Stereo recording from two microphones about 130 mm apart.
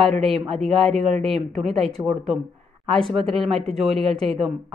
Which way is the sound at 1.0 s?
55° right (ahead or behind).